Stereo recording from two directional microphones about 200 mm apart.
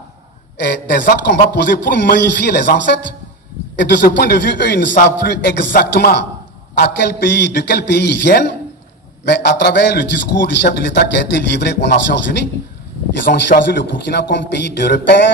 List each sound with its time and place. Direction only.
0.6 s a man's voice: 60° left (ahead or behind)
5.7 s a man's voice: 50° left (ahead or behind)